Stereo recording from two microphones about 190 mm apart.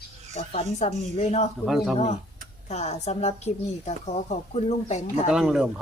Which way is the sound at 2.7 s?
35° left (ahead or behind).